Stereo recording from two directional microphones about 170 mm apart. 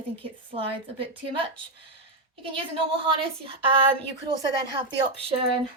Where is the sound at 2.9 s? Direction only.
30° right (ahead or behind).